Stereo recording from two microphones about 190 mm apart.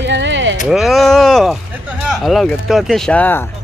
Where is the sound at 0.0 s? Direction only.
70° right (ahead or behind).